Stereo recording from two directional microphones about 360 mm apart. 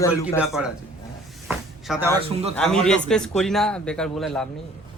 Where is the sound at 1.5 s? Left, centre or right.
Centre.